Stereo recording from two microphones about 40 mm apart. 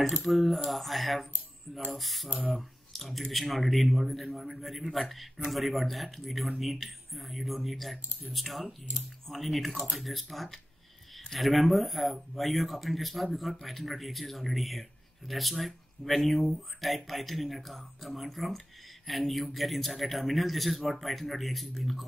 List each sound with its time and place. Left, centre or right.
0.2 s speech: centre